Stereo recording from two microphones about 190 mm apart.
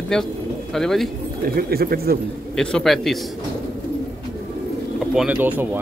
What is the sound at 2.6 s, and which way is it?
Speech, 5° left (ahead or behind).